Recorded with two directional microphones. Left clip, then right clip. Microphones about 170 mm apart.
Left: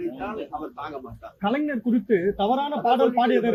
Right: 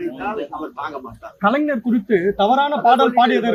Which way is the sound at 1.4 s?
45° right (ahead or behind).